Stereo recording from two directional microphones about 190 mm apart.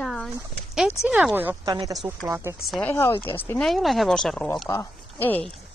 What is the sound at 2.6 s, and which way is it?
Speech, 5° left (ahead or behind).